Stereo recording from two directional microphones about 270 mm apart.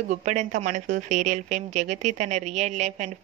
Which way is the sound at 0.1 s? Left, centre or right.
Right.